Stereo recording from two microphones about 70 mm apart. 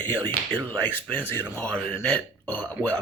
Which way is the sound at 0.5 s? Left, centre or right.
Left.